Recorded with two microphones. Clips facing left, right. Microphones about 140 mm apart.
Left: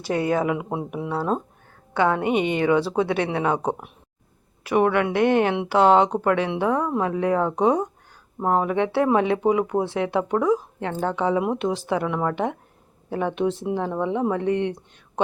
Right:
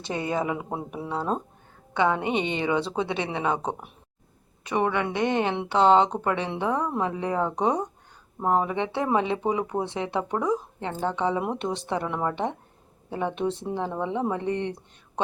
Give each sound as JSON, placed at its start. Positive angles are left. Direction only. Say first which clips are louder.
{"t": 0.3, "sound": "speech", "louder": "left 4 dB", "side_deg": 5}
{"t": 1.9, "sound": "a woman's voice", "louder": "left 2 dB", "side_deg": -20}
{"t": 2.1, "sound": "speech", "louder": "left 4 dB", "side_deg": 5}
{"t": 2.4, "sound": "speech", "louder": "left 5 dB", "side_deg": -30}
{"t": 2.6, "sound": "a woman's voice", "louder": "left 5 dB", "side_deg": 5}